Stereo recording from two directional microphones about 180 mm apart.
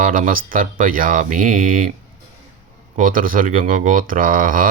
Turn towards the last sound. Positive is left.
turn(degrees=-50)  # may be behind; listen again after turning